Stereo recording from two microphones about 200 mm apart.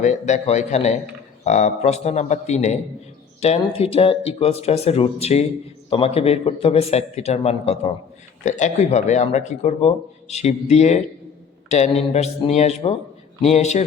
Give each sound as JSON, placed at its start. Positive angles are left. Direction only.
{"t": 0.0, "sound": "speech", "side_deg": 35}